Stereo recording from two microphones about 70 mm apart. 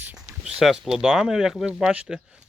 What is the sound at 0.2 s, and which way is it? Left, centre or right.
Speech, centre.